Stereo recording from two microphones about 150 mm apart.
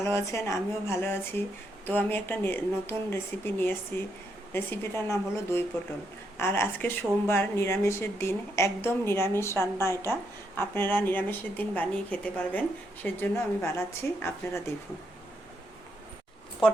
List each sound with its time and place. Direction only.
0.0 s speech: 20° left (ahead or behind)